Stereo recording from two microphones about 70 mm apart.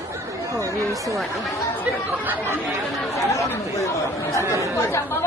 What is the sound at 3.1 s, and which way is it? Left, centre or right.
Speech, left.